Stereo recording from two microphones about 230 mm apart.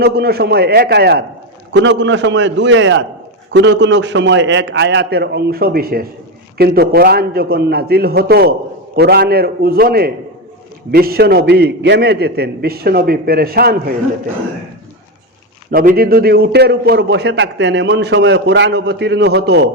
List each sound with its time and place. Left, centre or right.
0.0 s a man's voice: right
15.7 s a man's voice: right